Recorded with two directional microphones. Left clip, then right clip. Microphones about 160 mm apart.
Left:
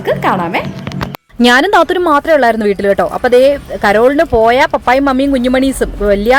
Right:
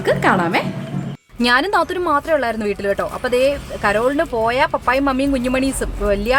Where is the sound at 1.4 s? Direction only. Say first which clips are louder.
Left 8 dB; 45° left (ahead or behind).